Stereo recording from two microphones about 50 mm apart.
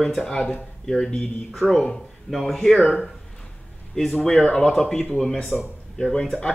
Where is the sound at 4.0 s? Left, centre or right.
Centre.